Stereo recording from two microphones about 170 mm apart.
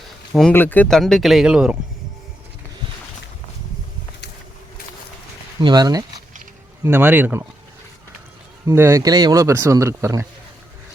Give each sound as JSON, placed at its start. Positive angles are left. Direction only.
{"t": 0.5, "sound": "speech", "side_deg": 10}
{"t": 5.5, "sound": "speech", "side_deg": -25}
{"t": 8.6, "sound": "speech", "side_deg": -15}